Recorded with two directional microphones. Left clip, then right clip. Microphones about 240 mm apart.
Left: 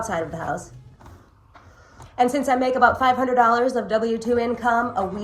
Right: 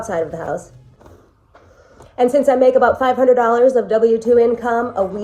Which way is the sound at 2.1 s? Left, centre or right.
Centre.